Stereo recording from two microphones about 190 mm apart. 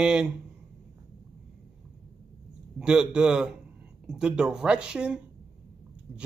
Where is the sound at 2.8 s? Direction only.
5° right (ahead or behind).